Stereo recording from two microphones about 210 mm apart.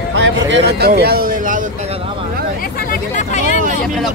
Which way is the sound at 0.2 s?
55° right (ahead or behind).